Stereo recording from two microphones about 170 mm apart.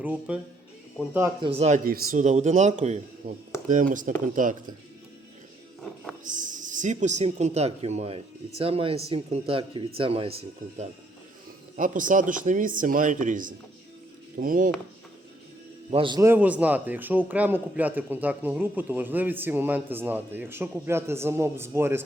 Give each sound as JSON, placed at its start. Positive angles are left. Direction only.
{"t": 0.0, "sound": "a man's voice", "side_deg": -10}
{"t": 1.4, "sound": "speech", "side_deg": -35}
{"t": 1.8, "sound": "speech", "side_deg": -50}
{"t": 6.2, "sound": "speech", "side_deg": -50}
{"t": 11.8, "sound": "speech", "side_deg": -50}
{"t": 15.9, "sound": "a man's voice", "side_deg": -30}
{"t": 16.2, "sound": "a man's voice", "side_deg": -10}